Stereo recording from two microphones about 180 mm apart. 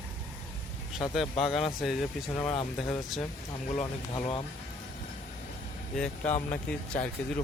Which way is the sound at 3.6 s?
35° left (ahead or behind).